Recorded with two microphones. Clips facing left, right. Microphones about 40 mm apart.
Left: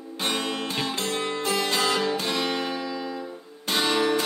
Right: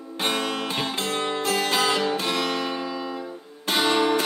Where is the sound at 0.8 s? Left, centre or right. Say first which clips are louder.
Right 1 dB; right.